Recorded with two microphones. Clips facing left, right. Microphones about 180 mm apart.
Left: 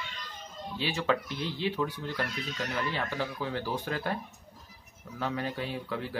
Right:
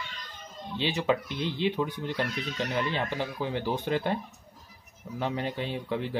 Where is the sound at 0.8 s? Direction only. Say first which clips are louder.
Right 3 dB; 20° right (ahead or behind).